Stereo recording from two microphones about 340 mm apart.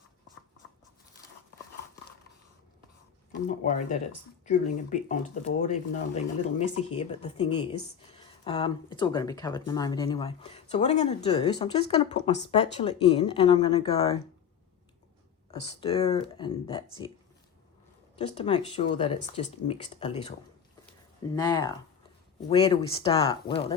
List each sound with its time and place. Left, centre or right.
3.4 s speech: left
15.6 s speech: centre
18.2 s speech: centre
21.3 s speech: centre